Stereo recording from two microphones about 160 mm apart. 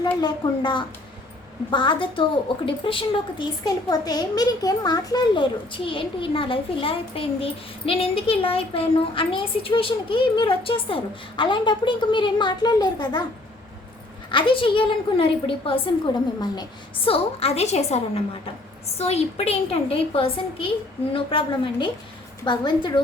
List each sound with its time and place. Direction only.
0.0 s a child's voice: 25° left (ahead or behind)
14.3 s a child's voice: 30° left (ahead or behind)